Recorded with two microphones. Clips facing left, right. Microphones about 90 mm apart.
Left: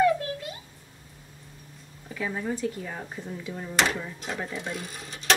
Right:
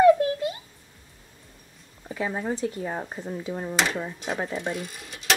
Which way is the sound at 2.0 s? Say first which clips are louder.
Right 2 dB; 30° right (ahead or behind).